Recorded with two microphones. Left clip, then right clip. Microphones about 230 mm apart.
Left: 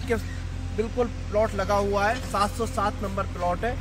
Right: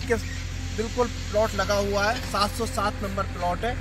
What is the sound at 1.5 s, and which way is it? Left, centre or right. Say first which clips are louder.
Speech: even; left.